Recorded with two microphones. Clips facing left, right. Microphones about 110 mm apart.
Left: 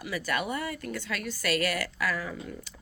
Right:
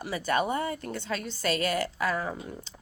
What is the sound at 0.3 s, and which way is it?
A woman's voice, 35° right (ahead or behind).